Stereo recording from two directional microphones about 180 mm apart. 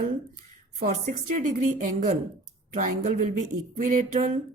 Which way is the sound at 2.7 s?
45° right (ahead or behind).